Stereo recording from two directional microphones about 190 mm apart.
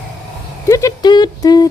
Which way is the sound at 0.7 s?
15° left (ahead or behind).